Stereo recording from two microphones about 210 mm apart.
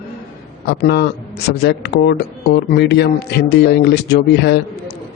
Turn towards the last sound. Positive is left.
turn(degrees=55)  # may be behind; listen again after turning